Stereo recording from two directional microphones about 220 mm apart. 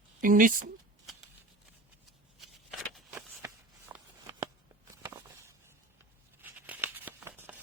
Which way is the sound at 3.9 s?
10° right (ahead or behind).